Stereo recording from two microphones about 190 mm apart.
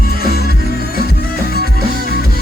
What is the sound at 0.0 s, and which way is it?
Music, 50° left (ahead or behind).